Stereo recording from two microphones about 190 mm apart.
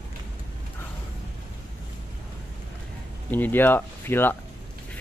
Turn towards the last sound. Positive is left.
turn(degrees=10)  # may be behind; listen again after turning